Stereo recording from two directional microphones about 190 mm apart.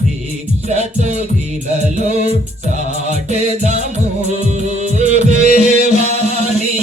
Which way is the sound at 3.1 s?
35° left (ahead or behind).